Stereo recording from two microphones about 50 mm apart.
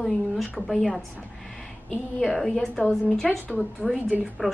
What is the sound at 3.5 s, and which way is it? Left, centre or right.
Speech, centre.